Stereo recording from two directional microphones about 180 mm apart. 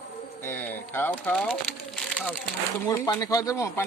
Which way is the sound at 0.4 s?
10° left (ahead or behind).